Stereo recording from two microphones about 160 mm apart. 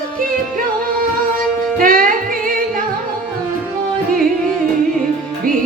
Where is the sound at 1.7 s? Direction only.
60° right (ahead or behind).